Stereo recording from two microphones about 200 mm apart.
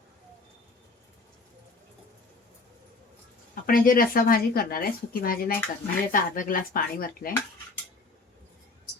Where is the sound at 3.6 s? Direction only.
45° left (ahead or behind).